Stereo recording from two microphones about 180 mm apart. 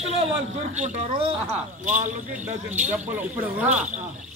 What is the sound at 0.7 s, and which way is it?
Speech, 40° right (ahead or behind).